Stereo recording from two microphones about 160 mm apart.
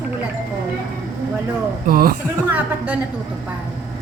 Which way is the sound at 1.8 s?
65° right (ahead or behind).